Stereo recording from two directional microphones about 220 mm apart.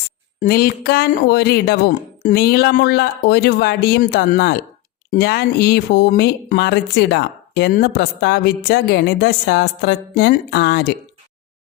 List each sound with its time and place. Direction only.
0.3 s speech: 45° left (ahead or behind)